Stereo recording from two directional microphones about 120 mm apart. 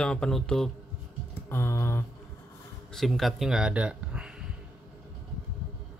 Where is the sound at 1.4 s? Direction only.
20° left (ahead or behind).